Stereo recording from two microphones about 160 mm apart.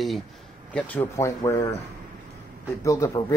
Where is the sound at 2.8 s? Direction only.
20° left (ahead or behind).